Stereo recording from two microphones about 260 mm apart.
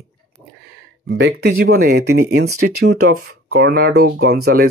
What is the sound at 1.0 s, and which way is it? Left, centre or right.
Speech, right.